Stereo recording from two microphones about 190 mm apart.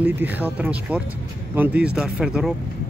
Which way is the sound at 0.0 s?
10° right (ahead or behind).